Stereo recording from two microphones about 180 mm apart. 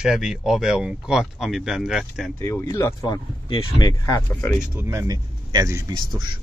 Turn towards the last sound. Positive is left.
turn(degrees=-20)  # may be behind; listen again after turning